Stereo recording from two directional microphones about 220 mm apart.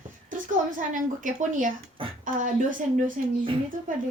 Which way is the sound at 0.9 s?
35° right (ahead or behind).